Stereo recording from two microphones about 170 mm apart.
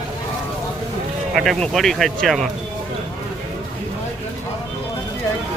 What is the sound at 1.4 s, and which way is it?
Speech, 5° left (ahead or behind).